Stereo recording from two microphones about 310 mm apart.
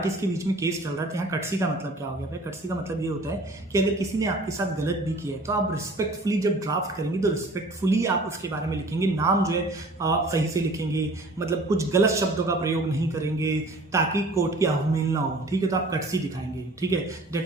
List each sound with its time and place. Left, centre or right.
0.2 s a man's voice: centre
3.7 s a man's voice: centre
13.9 s a man's voice: centre